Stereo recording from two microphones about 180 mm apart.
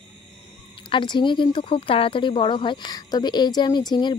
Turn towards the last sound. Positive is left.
turn(degrees=25)  # may be behind; listen again after turning